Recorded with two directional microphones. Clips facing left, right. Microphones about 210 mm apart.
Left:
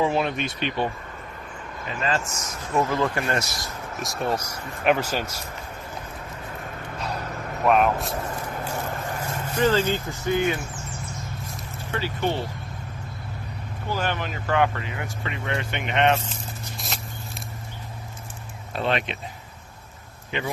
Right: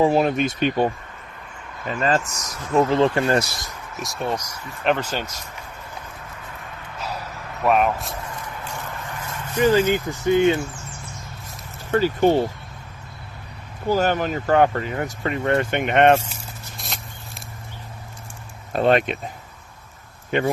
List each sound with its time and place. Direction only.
0.0 s speech: 40° right (ahead or behind)
1.9 s speech: 40° right (ahead or behind)
2.9 s speech: 25° right (ahead or behind)
3.9 s speech: centre (ahead or behind)
7.6 s speech: centre (ahead or behind)
8.3 s vehicle: 40° left (ahead or behind)
9.6 s speech: 10° right (ahead or behind)
11.9 s speech: 45° right (ahead or behind)
13.8 s speech: 40° right (ahead or behind)
16.7 s a sound: centre (ahead or behind)
18.7 s speech: 45° right (ahead or behind)
20.3 s speech: 50° right (ahead or behind)